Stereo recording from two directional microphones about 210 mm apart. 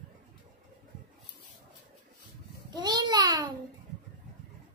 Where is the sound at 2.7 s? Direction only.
20° right (ahead or behind).